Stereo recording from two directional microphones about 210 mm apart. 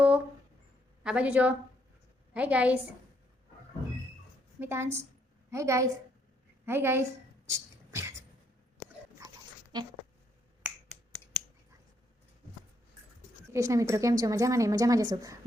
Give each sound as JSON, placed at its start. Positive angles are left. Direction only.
{"t": 1.0, "sound": "a woman's voice", "side_deg": -5}
{"t": 4.6, "sound": "a woman's voice", "side_deg": -10}
{"t": 7.4, "sound": "a sound", "side_deg": -15}
{"t": 9.7, "sound": "speech", "side_deg": -20}
{"t": 10.6, "sound": "finger snapping", "side_deg": 0}
{"t": 13.5, "sound": "a woman's voice", "side_deg": -15}